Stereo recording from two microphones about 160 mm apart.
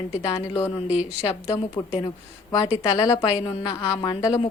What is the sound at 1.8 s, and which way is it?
A woman's voice, 20° left (ahead or behind).